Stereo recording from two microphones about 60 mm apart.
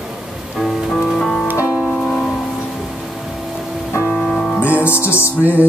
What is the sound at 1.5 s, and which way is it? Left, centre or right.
Music, left.